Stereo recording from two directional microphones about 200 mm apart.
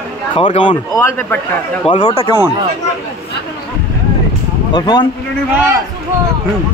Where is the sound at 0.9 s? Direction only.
10° left (ahead or behind).